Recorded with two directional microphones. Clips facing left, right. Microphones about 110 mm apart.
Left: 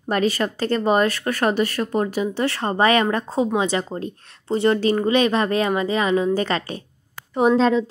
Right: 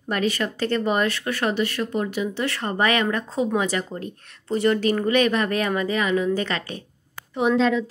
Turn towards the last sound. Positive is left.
turn(degrees=35)  # may be behind; listen again after turning